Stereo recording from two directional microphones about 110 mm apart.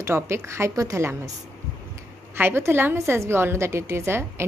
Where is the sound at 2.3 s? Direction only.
20° right (ahead or behind).